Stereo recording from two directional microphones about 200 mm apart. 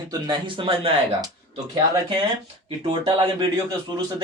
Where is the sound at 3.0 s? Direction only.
25° right (ahead or behind).